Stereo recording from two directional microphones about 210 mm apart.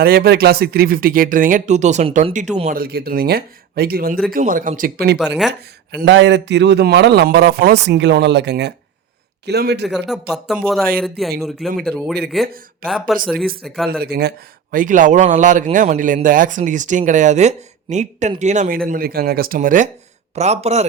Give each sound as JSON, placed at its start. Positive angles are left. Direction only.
{"t": 0.0, "sound": "a man's voice", "side_deg": -50}
{"t": 6.0, "sound": "a man's voice", "side_deg": -55}
{"t": 10.1, "sound": "speech", "side_deg": 0}
{"t": 14.0, "sound": "a man's voice", "side_deg": -50}
{"t": 18.9, "sound": "a man's voice", "side_deg": -45}